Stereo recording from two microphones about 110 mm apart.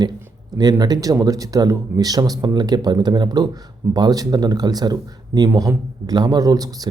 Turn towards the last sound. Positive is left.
turn(degrees=-35)  # may be behind; listen again after turning